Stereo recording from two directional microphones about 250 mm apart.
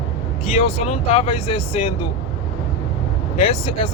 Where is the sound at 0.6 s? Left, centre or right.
Left.